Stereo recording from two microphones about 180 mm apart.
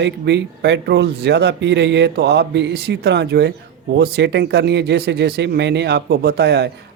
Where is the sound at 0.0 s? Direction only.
70° right (ahead or behind).